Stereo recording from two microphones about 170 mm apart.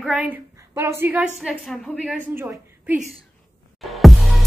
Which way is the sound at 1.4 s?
Centre (ahead or behind).